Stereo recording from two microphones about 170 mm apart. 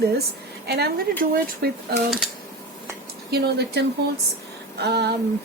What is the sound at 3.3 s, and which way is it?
Speech, 75° right (ahead or behind).